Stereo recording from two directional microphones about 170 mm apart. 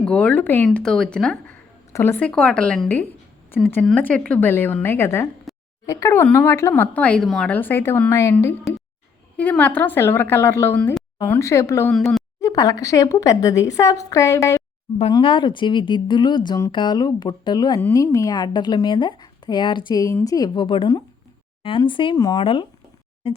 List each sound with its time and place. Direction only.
0.0 s a woman's voice: 5° left (ahead or behind)
11.9 s speech: centre (ahead or behind)
12.4 s speech: 20° left (ahead or behind)
15.1 s speech: 30° left (ahead or behind)
23.2 s a sound: 35° left (ahead or behind)